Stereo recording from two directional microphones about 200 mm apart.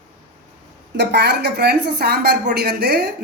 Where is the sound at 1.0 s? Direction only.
55° right (ahead or behind).